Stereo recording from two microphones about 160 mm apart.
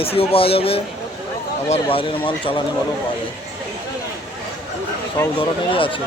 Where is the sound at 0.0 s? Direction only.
35° left (ahead or behind).